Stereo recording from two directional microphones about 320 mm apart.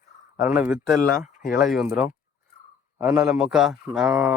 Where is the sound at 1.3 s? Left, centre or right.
Left.